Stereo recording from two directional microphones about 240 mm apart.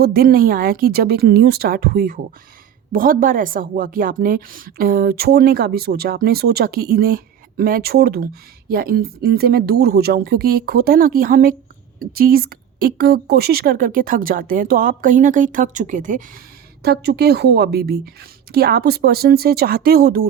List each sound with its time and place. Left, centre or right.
0.0 s a woman's voice: right
16.8 s a woman's voice: right